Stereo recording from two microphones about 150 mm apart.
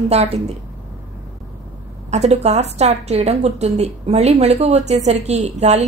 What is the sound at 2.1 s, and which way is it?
A woman's voice, 45° right (ahead or behind).